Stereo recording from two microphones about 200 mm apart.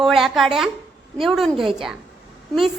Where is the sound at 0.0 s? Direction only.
Centre (ahead or behind).